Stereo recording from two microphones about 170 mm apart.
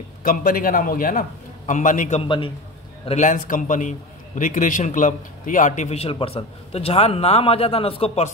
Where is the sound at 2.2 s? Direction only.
30° left (ahead or behind).